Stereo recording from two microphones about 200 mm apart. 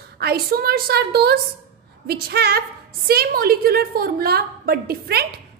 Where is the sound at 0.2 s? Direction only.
50° right (ahead or behind).